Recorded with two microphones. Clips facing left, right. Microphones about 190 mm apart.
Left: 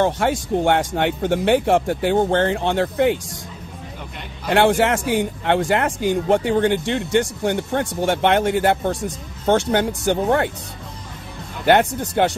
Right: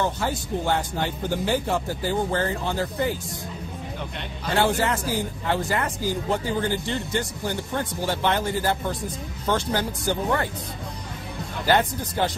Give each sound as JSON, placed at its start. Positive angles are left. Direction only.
{"t": 0.0, "sound": "a man's voice", "side_deg": 80}
{"t": 4.5, "sound": "a man's voice", "side_deg": 75}
{"t": 11.6, "sound": "speech", "side_deg": 70}